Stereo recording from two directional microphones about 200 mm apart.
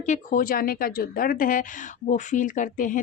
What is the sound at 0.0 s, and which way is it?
A woman's voice, 40° left (ahead or behind).